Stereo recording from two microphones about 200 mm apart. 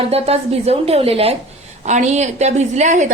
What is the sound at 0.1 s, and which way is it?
A woman's voice, 30° right (ahead or behind).